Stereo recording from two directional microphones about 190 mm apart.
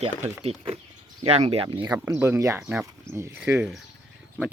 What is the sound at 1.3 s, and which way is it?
Speech, 30° right (ahead or behind).